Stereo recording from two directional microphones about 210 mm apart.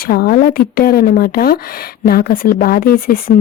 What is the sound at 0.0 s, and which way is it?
A woman's voice, 45° left (ahead or behind).